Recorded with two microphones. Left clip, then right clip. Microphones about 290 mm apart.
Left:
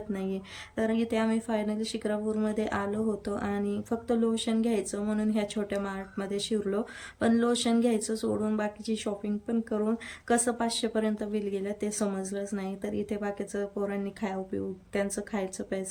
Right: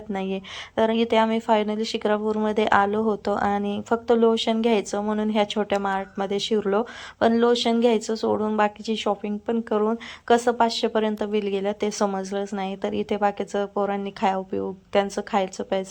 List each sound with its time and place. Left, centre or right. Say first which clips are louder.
0.1 s a woman's voice: right 9 dB; centre